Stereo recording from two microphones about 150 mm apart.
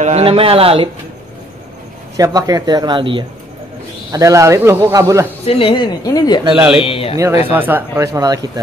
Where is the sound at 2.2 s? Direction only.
25° right (ahead or behind).